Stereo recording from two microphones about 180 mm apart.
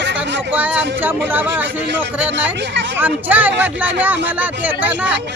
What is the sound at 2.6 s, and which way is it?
Speech, 75° right (ahead or behind).